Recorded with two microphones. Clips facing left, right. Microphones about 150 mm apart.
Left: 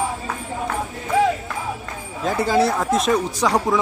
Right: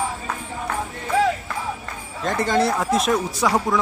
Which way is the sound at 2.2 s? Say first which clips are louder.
Left 2 dB; 5° left (ahead or behind).